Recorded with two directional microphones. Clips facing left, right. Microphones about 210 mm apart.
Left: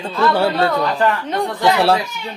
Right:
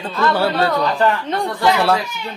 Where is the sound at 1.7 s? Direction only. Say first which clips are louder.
Left 3 dB; 30° left (ahead or behind).